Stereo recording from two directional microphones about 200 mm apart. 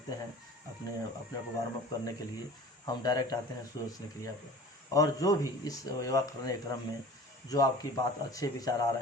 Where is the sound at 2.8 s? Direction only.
20° left (ahead or behind).